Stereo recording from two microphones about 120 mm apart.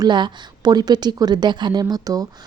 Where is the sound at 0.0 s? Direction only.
35° right (ahead or behind).